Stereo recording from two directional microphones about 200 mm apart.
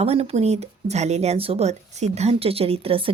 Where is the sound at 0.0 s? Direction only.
30° right (ahead or behind).